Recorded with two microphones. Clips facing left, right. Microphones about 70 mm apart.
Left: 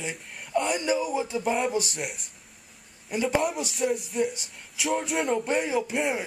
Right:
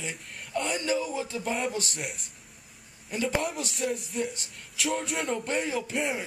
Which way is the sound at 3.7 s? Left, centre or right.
Centre.